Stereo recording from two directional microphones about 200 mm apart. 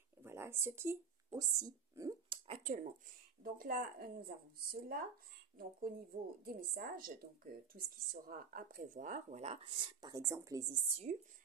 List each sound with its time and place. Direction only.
0.2 s speech: 10° right (ahead or behind); by 11.1 s 30° right (ahead or behind)